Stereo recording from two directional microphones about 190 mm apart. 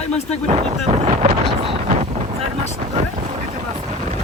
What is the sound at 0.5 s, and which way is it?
Wind noise, 35° right (ahead or behind).